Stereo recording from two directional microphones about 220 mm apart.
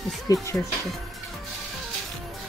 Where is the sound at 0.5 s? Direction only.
10° left (ahead or behind).